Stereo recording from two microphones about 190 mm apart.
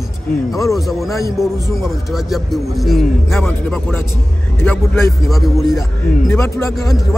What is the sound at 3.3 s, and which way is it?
Speech, 10° left (ahead or behind).